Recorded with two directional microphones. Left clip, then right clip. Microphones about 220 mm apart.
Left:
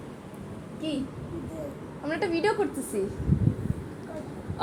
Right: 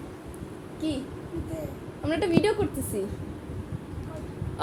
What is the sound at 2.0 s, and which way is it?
Speech, 20° right (ahead or behind).